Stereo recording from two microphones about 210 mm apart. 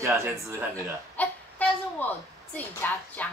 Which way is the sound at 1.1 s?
5° left (ahead or behind).